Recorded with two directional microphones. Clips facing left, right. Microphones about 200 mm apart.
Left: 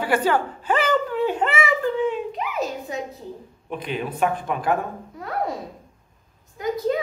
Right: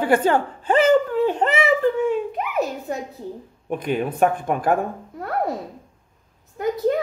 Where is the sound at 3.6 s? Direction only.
50° right (ahead or behind).